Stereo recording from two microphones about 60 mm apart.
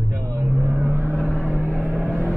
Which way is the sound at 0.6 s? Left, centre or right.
Right.